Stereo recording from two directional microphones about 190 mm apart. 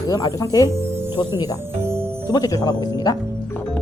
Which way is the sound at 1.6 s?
10° right (ahead or behind).